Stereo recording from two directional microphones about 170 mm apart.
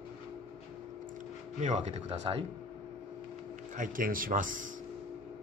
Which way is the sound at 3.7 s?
50° right (ahead or behind).